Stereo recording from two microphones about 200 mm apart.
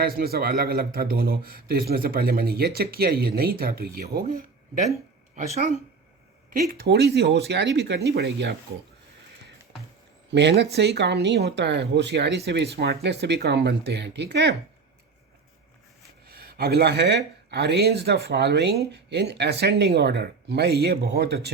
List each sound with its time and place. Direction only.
0.0 s speech: 50° right (ahead or behind)
6.5 s speech: 45° right (ahead or behind)
10.3 s speech: 60° right (ahead or behind)
16.2 s speech: 50° right (ahead or behind)